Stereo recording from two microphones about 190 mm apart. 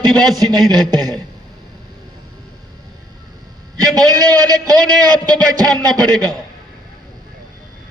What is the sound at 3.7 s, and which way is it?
A man's voice, 20° right (ahead or behind).